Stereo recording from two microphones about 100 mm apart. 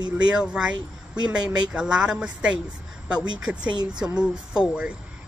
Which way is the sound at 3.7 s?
45° right (ahead or behind).